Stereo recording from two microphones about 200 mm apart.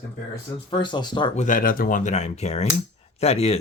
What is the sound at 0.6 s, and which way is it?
Speech, 25° left (ahead or behind).